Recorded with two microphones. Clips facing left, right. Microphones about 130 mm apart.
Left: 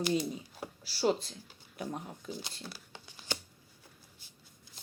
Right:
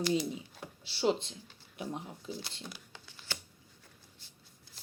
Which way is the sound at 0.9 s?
25° right (ahead or behind).